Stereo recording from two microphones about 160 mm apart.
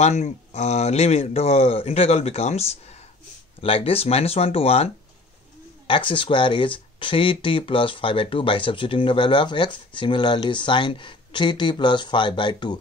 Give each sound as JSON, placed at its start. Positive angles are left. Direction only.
{"t": 0.0, "sound": "speech", "side_deg": 45}